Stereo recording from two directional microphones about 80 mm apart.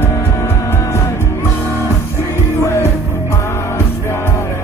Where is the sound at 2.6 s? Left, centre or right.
Left.